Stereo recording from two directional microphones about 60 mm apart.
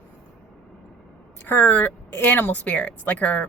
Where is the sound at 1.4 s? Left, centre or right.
Left.